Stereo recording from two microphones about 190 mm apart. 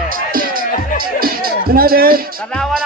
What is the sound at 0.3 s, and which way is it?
Music, 50° right (ahead or behind).